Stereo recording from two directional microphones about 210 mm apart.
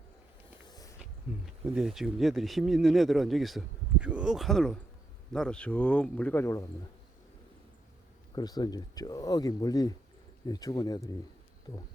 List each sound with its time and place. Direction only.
0.7 s a sound: 15° left (ahead or behind)
1.6 s speech: 5° right (ahead or behind); by 6.7 s 10° left (ahead or behind)
8.4 s speech: 20° left (ahead or behind)